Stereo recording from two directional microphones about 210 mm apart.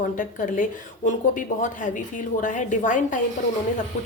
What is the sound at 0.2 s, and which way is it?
A woman's voice, 40° left (ahead or behind).